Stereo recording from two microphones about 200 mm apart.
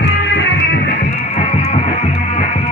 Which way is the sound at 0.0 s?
60° left (ahead or behind).